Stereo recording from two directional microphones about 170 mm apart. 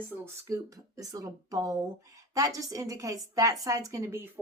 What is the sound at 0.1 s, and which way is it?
A woman's voice, 20° right (ahead or behind).